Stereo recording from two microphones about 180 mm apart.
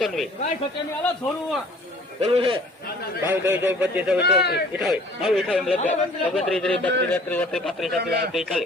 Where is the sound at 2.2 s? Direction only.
30° right (ahead or behind).